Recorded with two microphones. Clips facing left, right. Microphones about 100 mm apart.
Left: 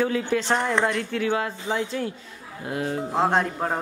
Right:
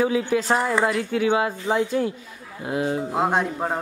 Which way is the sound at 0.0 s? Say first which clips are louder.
Right 2 dB; 10° right (ahead or behind).